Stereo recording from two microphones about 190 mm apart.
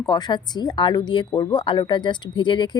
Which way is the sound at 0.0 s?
20° left (ahead or behind).